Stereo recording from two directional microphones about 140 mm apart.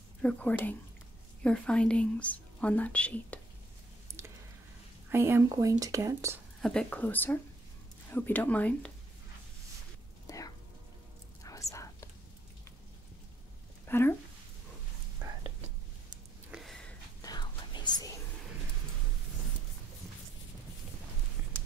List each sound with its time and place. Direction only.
0.2 s speech: 10° left (ahead or behind)
5.1 s speech: 20° right (ahead or behind)
6.6 s speech: 5° left (ahead or behind)
10.2 s a sound: 25° left (ahead or behind)
11.4 s whispering: 25° left (ahead or behind)
13.8 s a sound: 15° left (ahead or behind)
16.4 s sniff: centre (ahead or behind)
17.2 s whispering: 30° left (ahead or behind)